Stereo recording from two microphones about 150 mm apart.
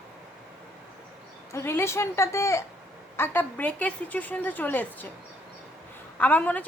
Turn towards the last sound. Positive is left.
turn(degrees=10)  # may be behind; listen again after turning